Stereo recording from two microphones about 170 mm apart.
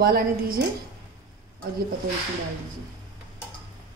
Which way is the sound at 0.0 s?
65° right (ahead or behind).